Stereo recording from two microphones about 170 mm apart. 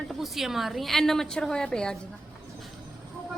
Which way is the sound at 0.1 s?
Centre (ahead or behind).